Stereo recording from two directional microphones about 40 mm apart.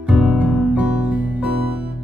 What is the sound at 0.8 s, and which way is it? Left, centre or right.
Music, right.